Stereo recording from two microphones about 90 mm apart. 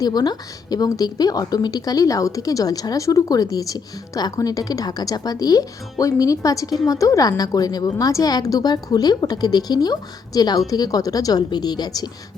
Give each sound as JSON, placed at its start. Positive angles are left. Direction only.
{"t": 0.0, "sound": "a woman's voice", "side_deg": 50}